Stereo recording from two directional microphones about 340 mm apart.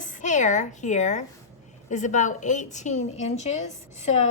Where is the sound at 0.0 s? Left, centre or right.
Left.